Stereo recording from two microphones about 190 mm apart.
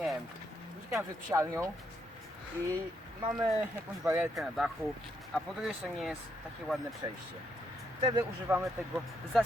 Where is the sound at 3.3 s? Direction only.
Centre (ahead or behind).